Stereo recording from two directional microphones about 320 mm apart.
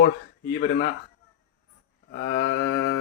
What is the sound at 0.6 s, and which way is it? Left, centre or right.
Speech, left.